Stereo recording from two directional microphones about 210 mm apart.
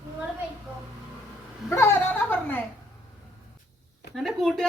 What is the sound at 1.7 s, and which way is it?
Speech, 10° left (ahead or behind).